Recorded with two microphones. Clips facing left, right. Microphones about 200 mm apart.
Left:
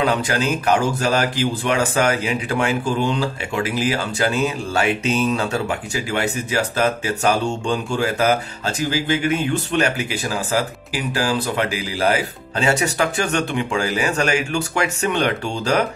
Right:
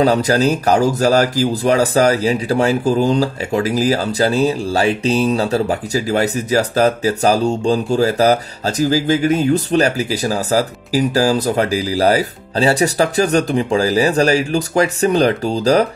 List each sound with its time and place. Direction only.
0.0 s speech: 40° right (ahead or behind)